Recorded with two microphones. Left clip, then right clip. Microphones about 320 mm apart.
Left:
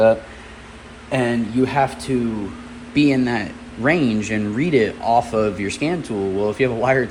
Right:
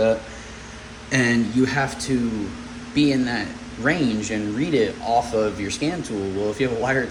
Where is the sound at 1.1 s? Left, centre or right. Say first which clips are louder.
Even; centre.